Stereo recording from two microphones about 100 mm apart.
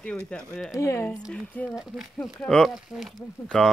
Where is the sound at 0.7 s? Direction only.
25° left (ahead or behind).